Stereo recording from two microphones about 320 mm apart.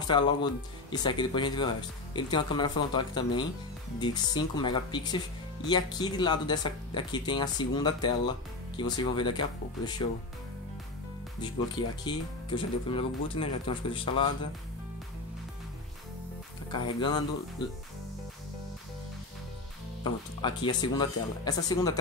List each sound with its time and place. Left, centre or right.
0.1 s speech: centre
11.4 s speech: centre
16.7 s speech: centre
20.0 s speech: centre